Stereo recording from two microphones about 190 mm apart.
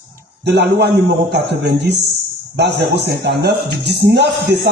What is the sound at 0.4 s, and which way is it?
Speech, 60° right (ahead or behind).